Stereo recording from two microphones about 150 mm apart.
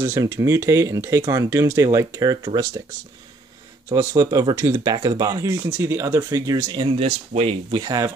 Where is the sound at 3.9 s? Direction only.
25° right (ahead or behind).